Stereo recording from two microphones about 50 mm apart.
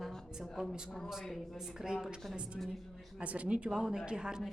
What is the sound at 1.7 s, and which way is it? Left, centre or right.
Speech, centre.